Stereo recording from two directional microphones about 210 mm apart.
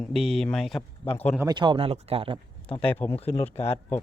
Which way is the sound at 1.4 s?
20° right (ahead or behind).